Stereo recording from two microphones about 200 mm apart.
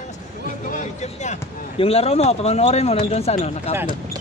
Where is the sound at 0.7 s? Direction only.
40° left (ahead or behind).